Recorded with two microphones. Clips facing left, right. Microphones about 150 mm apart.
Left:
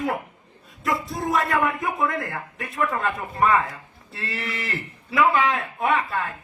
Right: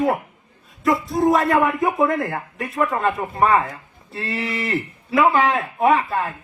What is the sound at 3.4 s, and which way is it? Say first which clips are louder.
Speech: right 3 dB; 35° right (ahead or behind).